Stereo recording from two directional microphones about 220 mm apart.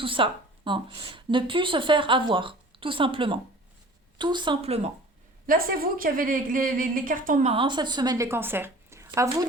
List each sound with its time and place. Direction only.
0.0 s a woman's voice: 25° right (ahead or behind)
5.5 s a woman's voice: 40° right (ahead or behind); by 9.5 s 15° right (ahead or behind)